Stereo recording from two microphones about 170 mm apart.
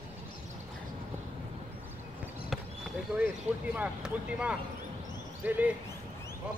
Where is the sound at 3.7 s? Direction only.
5° right (ahead or behind).